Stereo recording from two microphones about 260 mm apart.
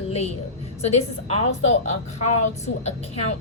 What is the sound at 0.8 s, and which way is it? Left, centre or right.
A woman's voice, left.